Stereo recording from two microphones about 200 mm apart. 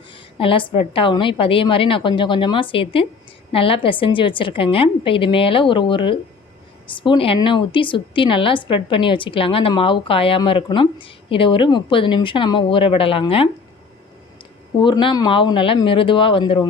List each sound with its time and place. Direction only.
0.3 s a woman's voice: 25° left (ahead or behind)
14.8 s a woman's voice: 25° left (ahead or behind)